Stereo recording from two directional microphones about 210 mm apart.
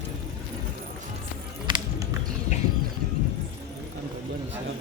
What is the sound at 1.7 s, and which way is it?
Music, 20° right (ahead or behind).